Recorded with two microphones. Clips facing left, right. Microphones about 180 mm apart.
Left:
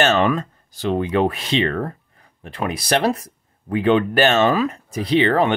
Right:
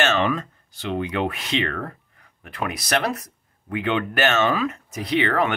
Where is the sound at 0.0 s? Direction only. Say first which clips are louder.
Left 4 dB; 40° left (ahead or behind).